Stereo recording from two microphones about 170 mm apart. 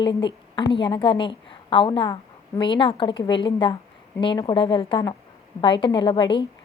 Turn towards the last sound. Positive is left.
turn(degrees=25)  # may be behind; listen again after turning